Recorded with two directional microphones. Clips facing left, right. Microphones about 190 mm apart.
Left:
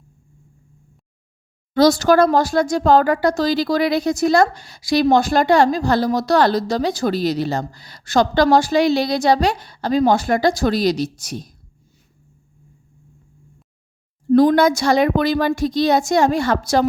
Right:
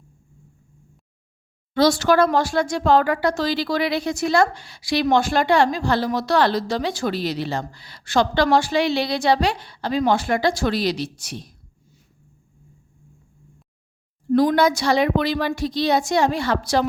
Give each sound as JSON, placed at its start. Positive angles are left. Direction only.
{"t": 1.7, "sound": "speech", "side_deg": 40}
{"t": 14.3, "sound": "a woman's voice", "side_deg": 50}